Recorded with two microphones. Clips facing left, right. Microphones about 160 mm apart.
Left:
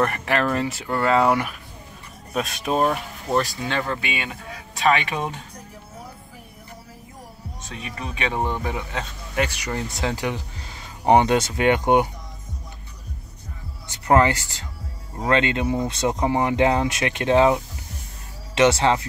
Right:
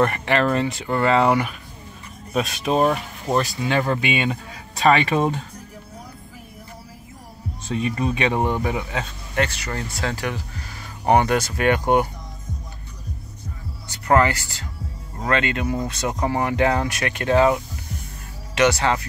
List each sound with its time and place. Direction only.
0.0 s speech: centre (ahead or behind); by 4.8 s 25° right (ahead or behind)
4.8 s speech: 35° right (ahead or behind)
8.0 s speech: 20° right (ahead or behind)
9.3 s speech: 10° left (ahead or behind)
13.8 s speech: 20° left (ahead or behind)